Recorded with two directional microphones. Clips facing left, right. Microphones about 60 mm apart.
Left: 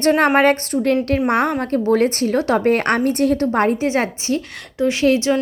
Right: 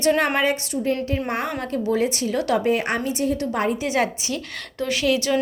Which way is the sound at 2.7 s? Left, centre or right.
Left.